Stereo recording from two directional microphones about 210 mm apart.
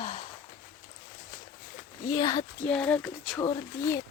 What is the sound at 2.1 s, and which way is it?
Speech, 20° left (ahead or behind).